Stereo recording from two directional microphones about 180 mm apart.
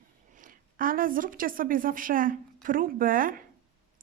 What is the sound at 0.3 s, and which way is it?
A woman's voice, 50° right (ahead or behind).